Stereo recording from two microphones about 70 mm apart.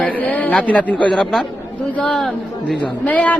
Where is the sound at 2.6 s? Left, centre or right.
Centre.